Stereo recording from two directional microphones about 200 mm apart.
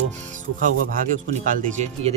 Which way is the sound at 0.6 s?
40° right (ahead or behind).